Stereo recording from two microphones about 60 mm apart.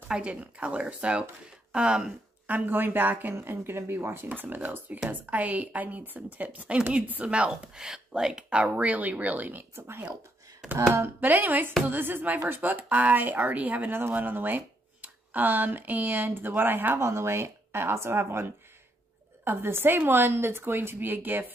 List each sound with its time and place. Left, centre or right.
0.1 s speech: centre
2.4 s speech: right
9.8 s speech: right
11.1 s speech: right
17.0 s speech: right